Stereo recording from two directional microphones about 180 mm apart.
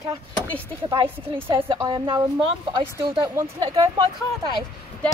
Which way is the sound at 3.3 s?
15° right (ahead or behind).